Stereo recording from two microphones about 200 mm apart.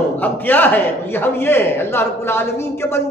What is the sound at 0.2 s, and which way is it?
A man's voice, 10° left (ahead or behind).